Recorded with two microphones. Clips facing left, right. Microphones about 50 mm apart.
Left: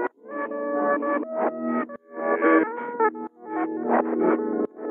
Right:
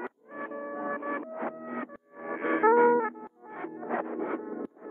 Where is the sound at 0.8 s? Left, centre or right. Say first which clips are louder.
Left 12 dB; left.